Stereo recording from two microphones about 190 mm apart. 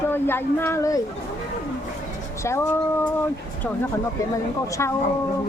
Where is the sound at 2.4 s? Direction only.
15° left (ahead or behind).